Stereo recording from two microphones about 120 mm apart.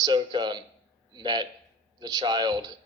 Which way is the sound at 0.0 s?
40° right (ahead or behind).